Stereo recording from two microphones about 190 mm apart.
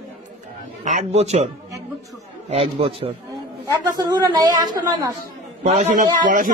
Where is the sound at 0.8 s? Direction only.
40° right (ahead or behind).